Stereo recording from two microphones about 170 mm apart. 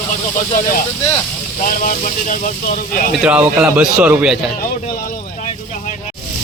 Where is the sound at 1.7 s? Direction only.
55° left (ahead or behind).